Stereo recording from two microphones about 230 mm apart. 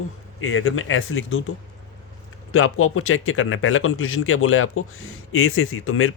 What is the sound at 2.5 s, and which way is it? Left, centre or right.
Speech, left.